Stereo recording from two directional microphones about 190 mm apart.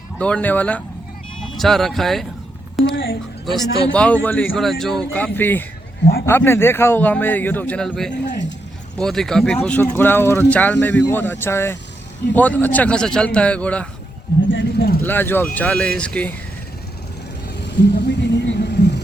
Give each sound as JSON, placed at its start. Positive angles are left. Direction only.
{"t": 0.2, "sound": "speech", "side_deg": 5}
{"t": 2.9, "sound": "speech", "side_deg": 75}
{"t": 3.4, "sound": "speech", "side_deg": 5}
{"t": 14.5, "sound": "speech", "side_deg": 60}
{"t": 15.0, "sound": "speech", "side_deg": 10}
{"t": 17.7, "sound": "a sound", "side_deg": 65}